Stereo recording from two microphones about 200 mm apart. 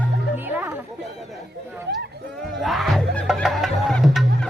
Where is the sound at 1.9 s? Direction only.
55° right (ahead or behind).